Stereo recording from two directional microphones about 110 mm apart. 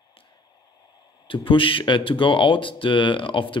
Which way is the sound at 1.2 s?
50° left (ahead or behind).